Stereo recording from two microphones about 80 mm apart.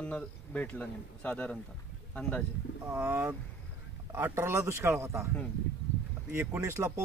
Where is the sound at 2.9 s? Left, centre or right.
Right.